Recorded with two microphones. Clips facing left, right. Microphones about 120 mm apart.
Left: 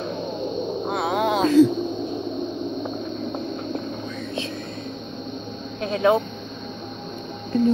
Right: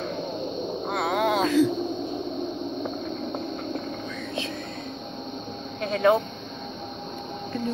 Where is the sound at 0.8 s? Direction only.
5° left (ahead or behind).